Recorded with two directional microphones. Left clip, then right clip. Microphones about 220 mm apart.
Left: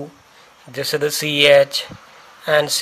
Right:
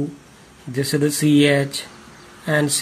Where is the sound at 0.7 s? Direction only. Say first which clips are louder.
Left 1 dB; 35° left (ahead or behind).